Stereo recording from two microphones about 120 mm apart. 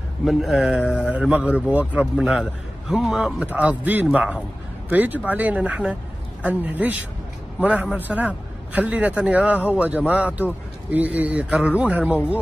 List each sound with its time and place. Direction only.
0.2 s a man's voice: centre (ahead or behind)